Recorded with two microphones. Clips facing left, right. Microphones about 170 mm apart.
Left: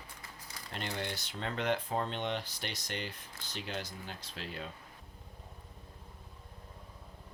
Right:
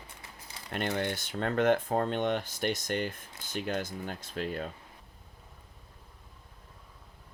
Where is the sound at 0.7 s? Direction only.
55° right (ahead or behind).